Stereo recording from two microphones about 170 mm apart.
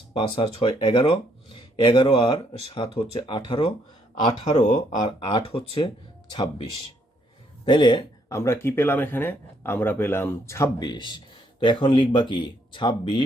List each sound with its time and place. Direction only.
0.1 s speech: 30° left (ahead or behind)
4.4 s speech: 40° left (ahead or behind)
5.2 s speech: 30° left (ahead or behind)
7.6 s speech: 30° left (ahead or behind)